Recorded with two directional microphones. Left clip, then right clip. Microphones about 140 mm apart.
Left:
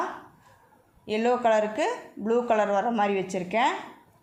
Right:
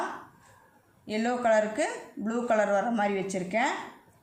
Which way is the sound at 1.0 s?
25° left (ahead or behind).